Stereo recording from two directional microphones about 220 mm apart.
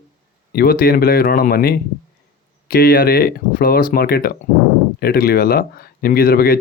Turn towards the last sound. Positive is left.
turn(degrees=45)  # may be behind; listen again after turning